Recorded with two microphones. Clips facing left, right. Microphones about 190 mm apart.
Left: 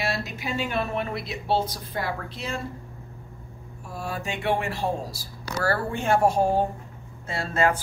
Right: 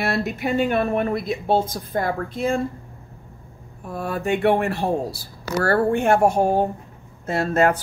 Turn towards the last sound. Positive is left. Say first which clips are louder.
# right 5 dB
turn(degrees=-45)  # may be behind; listen again after turning